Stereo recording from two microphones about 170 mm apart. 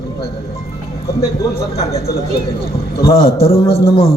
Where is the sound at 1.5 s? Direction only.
20° left (ahead or behind).